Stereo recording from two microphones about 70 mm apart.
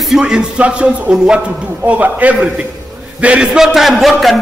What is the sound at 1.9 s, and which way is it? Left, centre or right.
A man's voice, right.